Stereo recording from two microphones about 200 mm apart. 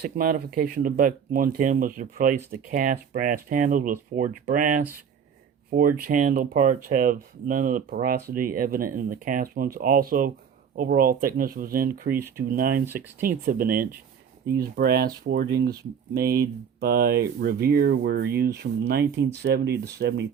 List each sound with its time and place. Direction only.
0.0 s speech: 45° right (ahead or behind)
12.8 s speech: 10° right (ahead or behind)
13.2 s speech: 45° right (ahead or behind)